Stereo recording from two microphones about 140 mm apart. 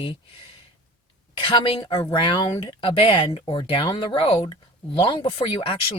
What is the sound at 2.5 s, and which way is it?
Speech, 25° left (ahead or behind).